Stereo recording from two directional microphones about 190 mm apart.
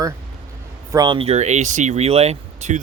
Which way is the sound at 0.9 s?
20° right (ahead or behind).